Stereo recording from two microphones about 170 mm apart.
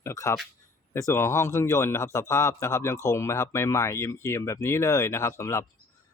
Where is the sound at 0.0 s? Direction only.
20° left (ahead or behind).